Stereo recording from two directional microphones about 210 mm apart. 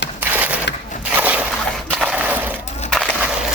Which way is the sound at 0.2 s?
5° right (ahead or behind).